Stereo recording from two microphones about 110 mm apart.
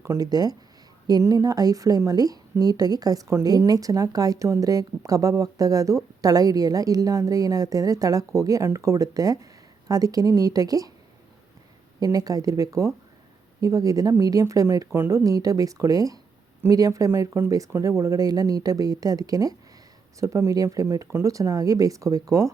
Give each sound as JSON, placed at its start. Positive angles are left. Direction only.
{"t": 0.0, "sound": "a woman's voice", "side_deg": -30}
{"t": 11.9, "sound": "a woman's voice", "side_deg": -35}